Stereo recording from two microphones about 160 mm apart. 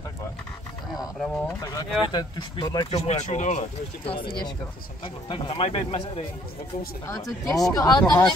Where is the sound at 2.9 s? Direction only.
45° left (ahead or behind).